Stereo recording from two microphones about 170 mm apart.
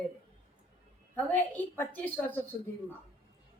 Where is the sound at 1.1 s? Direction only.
10° left (ahead or behind).